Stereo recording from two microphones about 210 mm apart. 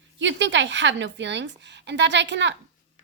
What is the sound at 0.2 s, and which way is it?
A woman's voice, 60° right (ahead or behind).